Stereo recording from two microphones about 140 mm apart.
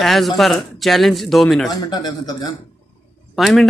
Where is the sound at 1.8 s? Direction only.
30° left (ahead or behind).